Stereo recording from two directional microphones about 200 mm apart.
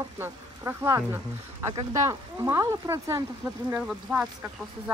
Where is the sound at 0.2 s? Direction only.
10° right (ahead or behind).